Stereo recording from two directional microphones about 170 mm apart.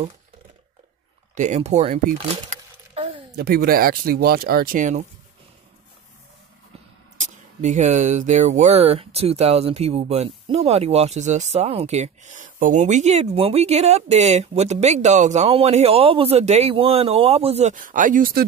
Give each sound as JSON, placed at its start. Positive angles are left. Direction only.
{"t": 1.3, "sound": "speech", "side_deg": -45}
{"t": 3.3, "sound": "speech", "side_deg": -70}
{"t": 7.2, "sound": "speech", "side_deg": -45}